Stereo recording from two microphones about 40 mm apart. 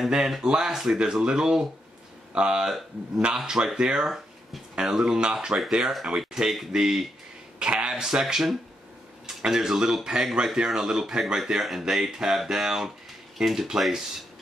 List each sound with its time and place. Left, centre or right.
0.4 s speech: centre
6.4 s speech: centre
6.7 s speech: centre
7.5 s a sound: right
7.9 s speech: centre